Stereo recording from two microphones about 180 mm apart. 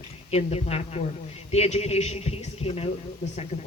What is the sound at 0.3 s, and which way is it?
Speech, 35° left (ahead or behind).